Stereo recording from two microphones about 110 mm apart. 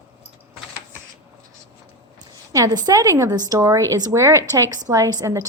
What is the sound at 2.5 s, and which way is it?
A woman's voice, 35° right (ahead or behind).